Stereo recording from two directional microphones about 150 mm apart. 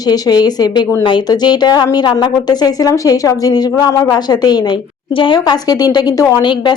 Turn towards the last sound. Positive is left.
turn(degrees=30)  # may be behind; listen again after turning